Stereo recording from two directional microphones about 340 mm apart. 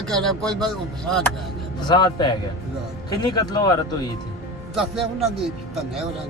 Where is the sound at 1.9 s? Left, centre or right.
Centre.